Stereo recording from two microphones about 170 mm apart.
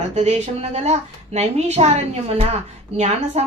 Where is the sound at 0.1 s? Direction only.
40° right (ahead or behind).